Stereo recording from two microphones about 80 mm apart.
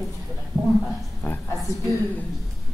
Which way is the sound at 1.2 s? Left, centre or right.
Left.